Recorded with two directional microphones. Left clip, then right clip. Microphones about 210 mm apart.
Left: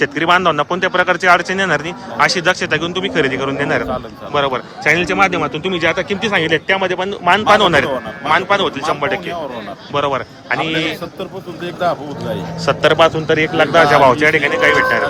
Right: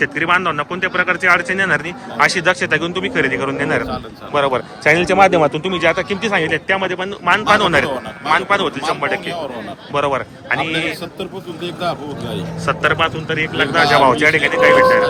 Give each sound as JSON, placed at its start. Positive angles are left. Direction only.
{"t": 0.0, "sound": "a man's voice", "side_deg": 20}
{"t": 12.6, "sound": "a man's voice", "side_deg": 20}
{"t": 13.8, "sound": "a man's voice", "side_deg": 10}